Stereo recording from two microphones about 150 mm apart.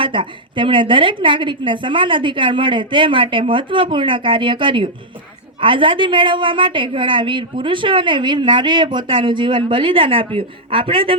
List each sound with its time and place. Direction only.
0.0 s a woman's voice: 35° right (ahead or behind)